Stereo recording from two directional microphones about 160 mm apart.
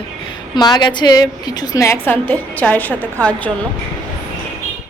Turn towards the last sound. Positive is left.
turn(degrees=10)  # may be behind; listen again after turning